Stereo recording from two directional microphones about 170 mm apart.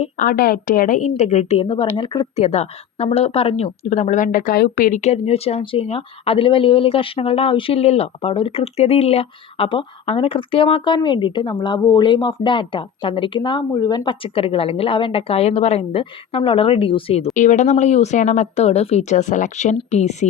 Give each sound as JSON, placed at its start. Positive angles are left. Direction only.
{"t": 0.0, "sound": "speech", "side_deg": 50}
{"t": 1.6, "sound": "a woman's voice", "side_deg": 30}
{"t": 17.3, "sound": "speech", "side_deg": 45}